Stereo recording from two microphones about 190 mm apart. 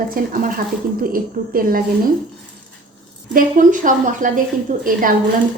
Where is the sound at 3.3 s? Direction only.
45° right (ahead or behind).